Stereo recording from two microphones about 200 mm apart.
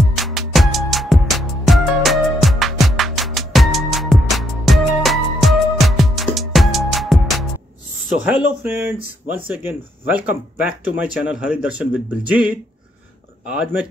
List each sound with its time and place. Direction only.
0.1 s music: centre (ahead or behind)
8.3 s speech: 10° right (ahead or behind)